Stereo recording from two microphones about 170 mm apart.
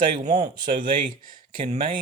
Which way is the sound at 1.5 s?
40° right (ahead or behind).